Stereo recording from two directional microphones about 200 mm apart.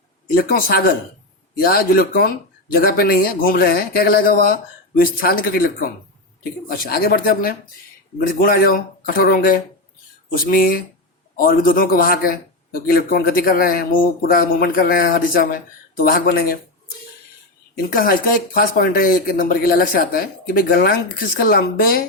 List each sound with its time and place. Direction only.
0.3 s speech: 50° left (ahead or behind)
17.9 s speech: 45° left (ahead or behind)